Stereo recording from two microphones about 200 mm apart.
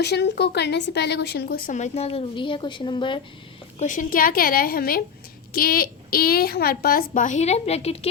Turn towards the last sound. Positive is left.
turn(degrees=30)  # may be behind; listen again after turning